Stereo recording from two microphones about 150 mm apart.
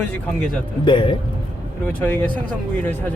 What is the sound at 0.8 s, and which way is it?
Speech, 35° left (ahead or behind).